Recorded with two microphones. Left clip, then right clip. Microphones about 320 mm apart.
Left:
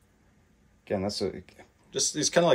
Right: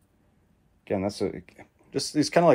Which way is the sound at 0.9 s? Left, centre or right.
Right.